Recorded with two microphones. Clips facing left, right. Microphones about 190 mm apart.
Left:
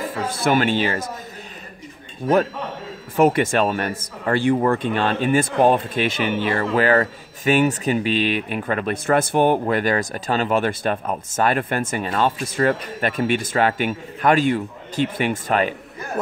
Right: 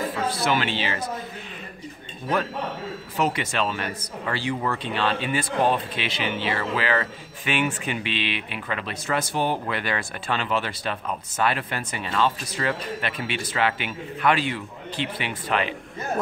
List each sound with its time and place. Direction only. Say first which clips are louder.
0.3 s speech: left 9 dB; 50° left (ahead or behind)
3.2 s speech: left 9 dB; 50° left (ahead or behind)